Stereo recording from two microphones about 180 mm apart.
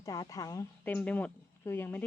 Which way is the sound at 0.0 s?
20° left (ahead or behind).